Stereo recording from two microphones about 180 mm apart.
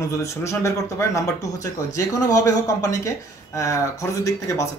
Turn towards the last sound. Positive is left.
turn(degrees=15)  # may be behind; listen again after turning